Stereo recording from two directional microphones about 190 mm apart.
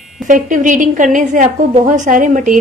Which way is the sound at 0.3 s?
40° right (ahead or behind).